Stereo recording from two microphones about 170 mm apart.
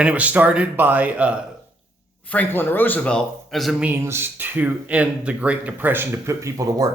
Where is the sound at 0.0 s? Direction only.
10° right (ahead or behind).